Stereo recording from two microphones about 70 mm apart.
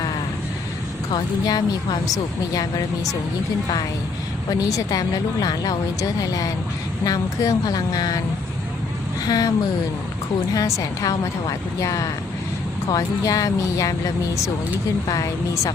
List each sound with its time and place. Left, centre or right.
1.5 s speech: left
4.4 s speech: left
9.2 s speech: left
10.5 s speech: left